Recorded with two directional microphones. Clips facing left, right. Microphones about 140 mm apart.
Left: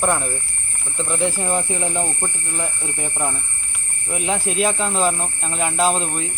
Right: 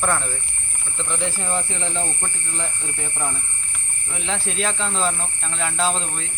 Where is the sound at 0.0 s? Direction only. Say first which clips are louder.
Left 3 dB; 20° left (ahead or behind).